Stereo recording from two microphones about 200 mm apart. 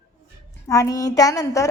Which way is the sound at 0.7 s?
15° left (ahead or behind).